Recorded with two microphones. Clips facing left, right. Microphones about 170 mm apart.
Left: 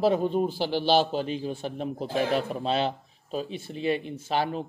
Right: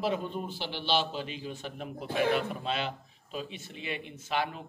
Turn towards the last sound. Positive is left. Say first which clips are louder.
# left 5 dB
turn(degrees=35)  # may be behind; listen again after turning